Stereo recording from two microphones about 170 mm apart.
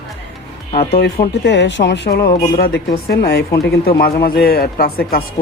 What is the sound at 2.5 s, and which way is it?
Speech, 60° left (ahead or behind).